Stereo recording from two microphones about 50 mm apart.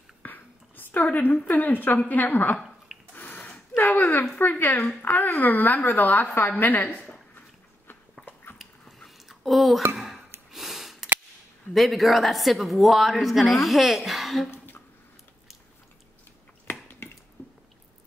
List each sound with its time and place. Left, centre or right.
0.2 s whispering: left
1.1 s a woman's voice: left
3.2 s a sound: left
4.4 s a woman's voice: left
8.5 s dog: centre
9.3 s a child's voice: centre
9.9 s a sound: centre
11.7 s speech: centre
17.0 s mechanisms: left
17.4 s squish: left